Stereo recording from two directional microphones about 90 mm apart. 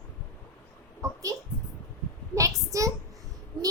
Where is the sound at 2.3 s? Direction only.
35° right (ahead or behind).